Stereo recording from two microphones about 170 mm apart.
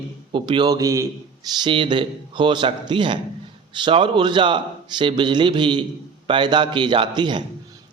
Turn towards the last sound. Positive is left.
turn(degrees=-25)  # may be behind; listen again after turning